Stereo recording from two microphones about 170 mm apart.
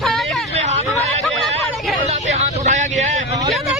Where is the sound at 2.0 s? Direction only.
40° right (ahead or behind).